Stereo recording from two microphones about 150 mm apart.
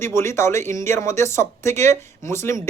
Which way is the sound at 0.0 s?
15° left (ahead or behind).